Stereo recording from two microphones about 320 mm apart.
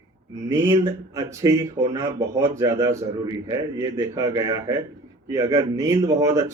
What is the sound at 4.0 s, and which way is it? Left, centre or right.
Speech, centre.